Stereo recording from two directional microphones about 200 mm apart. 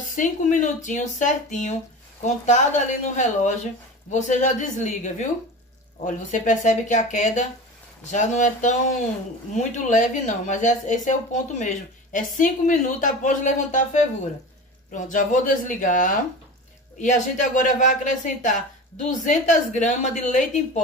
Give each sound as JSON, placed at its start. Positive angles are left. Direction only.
{"t": 0.1, "sound": "speech", "side_deg": 40}
{"t": 14.9, "sound": "speech", "side_deg": 40}